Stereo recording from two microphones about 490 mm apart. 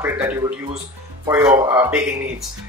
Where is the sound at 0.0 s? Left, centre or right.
Centre.